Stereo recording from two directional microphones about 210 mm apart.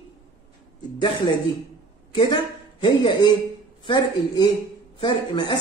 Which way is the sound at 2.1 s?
20° left (ahead or behind).